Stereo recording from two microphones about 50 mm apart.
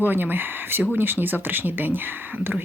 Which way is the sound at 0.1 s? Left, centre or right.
Right.